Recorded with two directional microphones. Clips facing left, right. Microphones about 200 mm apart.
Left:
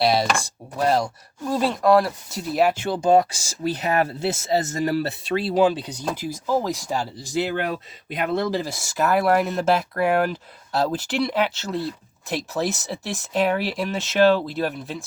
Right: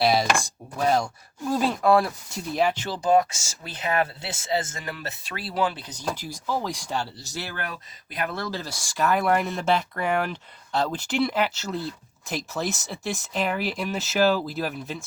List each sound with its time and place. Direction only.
0.0 s speech: centre (ahead or behind)
1.5 s speech: centre (ahead or behind)
2.9 s speech: 25° left (ahead or behind)
3.6 s speech: 40° left (ahead or behind); by 5.8 s 25° left (ahead or behind)
5.8 s speech: 10° left (ahead or behind)
8.9 s speech: 5° left (ahead or behind)